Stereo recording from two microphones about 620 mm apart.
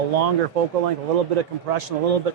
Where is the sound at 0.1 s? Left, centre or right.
Right.